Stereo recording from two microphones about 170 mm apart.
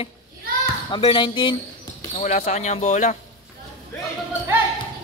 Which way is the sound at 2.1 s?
45° left (ahead or behind).